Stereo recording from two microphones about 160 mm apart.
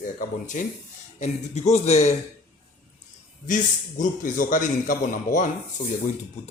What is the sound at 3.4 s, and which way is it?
A man's voice, 55° left (ahead or behind).